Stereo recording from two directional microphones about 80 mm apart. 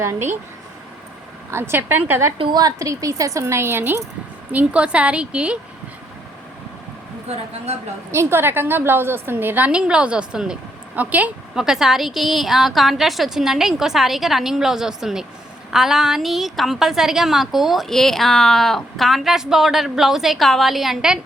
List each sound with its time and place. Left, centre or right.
0.0 s speech: right
1.5 s a woman's voice: right
2.4 s speech: right
4.5 s a woman's voice: centre
8.1 s a woman's voice: right; by 10.6 s centre
10.9 s a woman's voice: centre
11.5 s a woman's voice: centre